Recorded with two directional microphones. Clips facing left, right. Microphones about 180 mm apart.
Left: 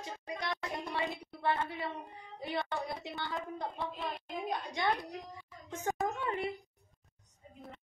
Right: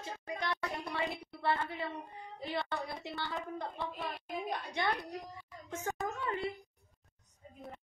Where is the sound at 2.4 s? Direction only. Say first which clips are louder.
Left 1 dB; 15° left (ahead or behind).